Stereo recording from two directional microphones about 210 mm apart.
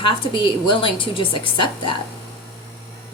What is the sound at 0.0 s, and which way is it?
A woman's voice, 25° left (ahead or behind).